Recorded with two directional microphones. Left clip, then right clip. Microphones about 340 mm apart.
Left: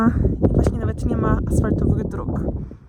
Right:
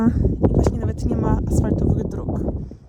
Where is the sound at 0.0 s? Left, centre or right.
Centre.